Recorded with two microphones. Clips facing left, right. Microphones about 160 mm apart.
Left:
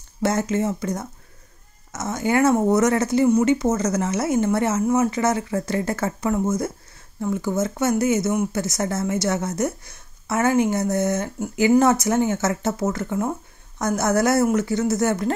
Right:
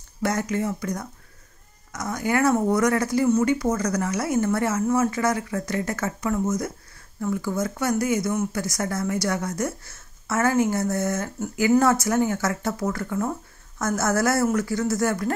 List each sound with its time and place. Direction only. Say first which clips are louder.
0.2 s speech: left 3 dB; 25° left (ahead or behind)